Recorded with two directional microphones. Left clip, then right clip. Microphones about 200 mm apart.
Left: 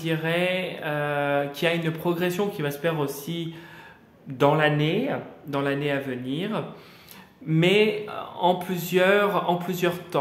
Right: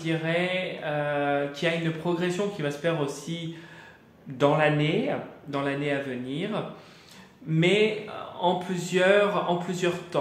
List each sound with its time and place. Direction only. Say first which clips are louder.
0.0 s mantra: left 2 dB; 45° left (ahead or behind)
4.4 s speech: left 2 dB; 40° left (ahead or behind)